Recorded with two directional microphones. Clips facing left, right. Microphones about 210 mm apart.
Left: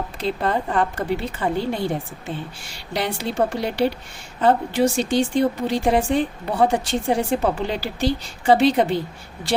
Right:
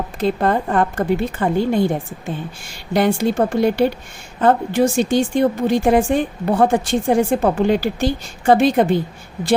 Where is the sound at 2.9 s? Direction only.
50° right (ahead or behind).